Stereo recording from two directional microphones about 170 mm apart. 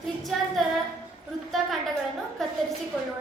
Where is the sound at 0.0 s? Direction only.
Centre (ahead or behind).